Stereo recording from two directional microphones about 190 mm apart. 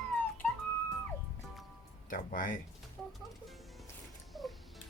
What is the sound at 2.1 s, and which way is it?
Speech, 45° left (ahead or behind).